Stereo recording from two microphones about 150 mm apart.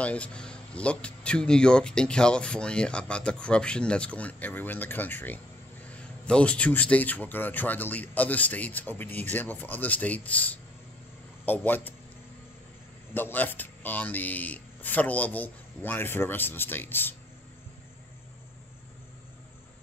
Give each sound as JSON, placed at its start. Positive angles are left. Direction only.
{"t": 0.0, "sound": "speech", "side_deg": 10}
{"t": 13.1, "sound": "speech", "side_deg": 15}